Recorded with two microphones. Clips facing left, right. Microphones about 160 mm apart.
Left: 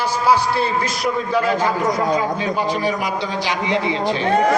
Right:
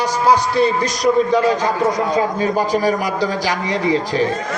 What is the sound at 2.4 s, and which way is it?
A man's voice, 40° right (ahead or behind).